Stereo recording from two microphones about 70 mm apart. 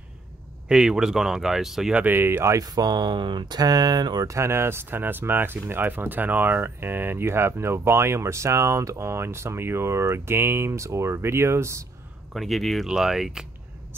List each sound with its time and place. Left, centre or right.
0.7 s speech: centre
2.0 s speech: right
2.5 s speech: right
4.3 s speech: right
12.4 s speech: centre